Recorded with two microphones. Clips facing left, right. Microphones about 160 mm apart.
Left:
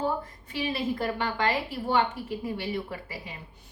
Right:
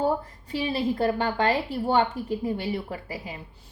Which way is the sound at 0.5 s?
35° right (ahead or behind).